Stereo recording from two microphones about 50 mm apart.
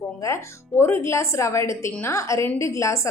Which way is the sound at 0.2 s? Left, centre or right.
Left.